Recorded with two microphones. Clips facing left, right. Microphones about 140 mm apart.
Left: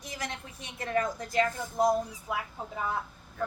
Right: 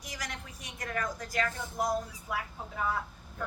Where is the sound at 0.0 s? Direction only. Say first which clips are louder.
Left 4 dB; 25° left (ahead or behind).